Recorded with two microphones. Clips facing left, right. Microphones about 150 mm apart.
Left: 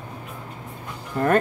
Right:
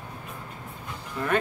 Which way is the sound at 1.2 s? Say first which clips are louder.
Left 9 dB; 55° left (ahead or behind).